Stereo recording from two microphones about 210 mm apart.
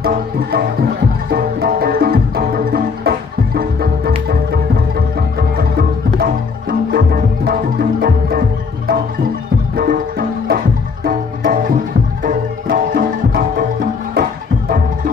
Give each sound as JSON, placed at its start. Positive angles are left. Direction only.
{"t": 0.0, "sound": "music", "side_deg": -45}
{"t": 5.6, "sound": "music", "side_deg": -45}